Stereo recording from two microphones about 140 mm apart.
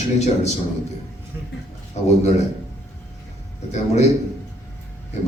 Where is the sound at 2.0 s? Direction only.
50° left (ahead or behind).